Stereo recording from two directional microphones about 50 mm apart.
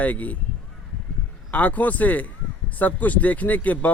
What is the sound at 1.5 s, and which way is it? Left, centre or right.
Speech, left.